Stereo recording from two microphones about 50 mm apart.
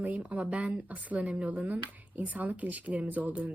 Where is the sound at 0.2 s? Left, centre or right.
Right.